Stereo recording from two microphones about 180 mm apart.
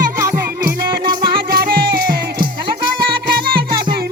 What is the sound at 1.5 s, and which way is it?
Music, 55° right (ahead or behind).